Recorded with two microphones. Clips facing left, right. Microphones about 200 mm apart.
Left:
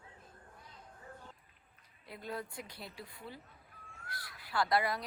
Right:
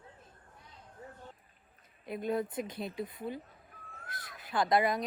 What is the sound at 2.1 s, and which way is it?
Speech, 20° right (ahead or behind).